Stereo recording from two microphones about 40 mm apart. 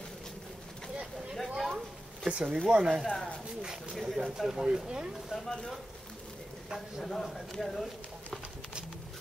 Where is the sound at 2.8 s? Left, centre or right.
Centre.